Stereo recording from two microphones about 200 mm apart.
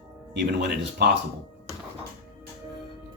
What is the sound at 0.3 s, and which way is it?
Speech, 55° right (ahead or behind).